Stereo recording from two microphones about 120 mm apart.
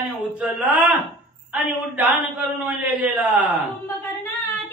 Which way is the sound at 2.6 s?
15° right (ahead or behind).